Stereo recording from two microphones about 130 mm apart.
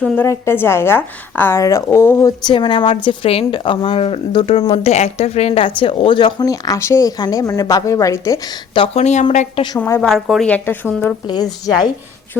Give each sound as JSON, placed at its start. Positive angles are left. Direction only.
{"t": 0.3, "sound": "a woman's voice", "side_deg": 20}
{"t": 9.0, "sound": "a woman's voice", "side_deg": 60}
{"t": 9.7, "sound": "a woman's voice", "side_deg": 20}
{"t": 10.0, "sound": "a woman's voice", "side_deg": 0}
{"t": 10.4, "sound": "speech", "side_deg": 15}
{"t": 11.3, "sound": "a woman's voice", "side_deg": 30}